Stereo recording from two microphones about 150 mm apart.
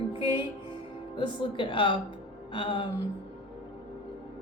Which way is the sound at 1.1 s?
35° left (ahead or behind).